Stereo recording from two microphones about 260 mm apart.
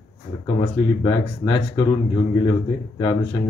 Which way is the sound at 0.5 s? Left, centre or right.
Centre.